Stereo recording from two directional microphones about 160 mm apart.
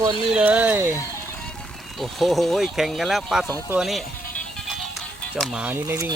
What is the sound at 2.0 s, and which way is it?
Speech, centre (ahead or behind).